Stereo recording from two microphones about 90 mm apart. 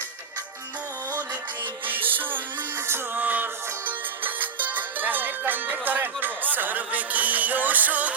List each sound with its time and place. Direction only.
1.9 s music: 20° right (ahead or behind)